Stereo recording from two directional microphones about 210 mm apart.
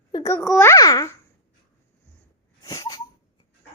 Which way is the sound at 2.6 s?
15° left (ahead or behind).